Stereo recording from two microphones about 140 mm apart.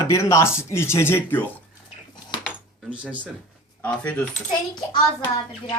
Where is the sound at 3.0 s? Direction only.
10° right (ahead or behind).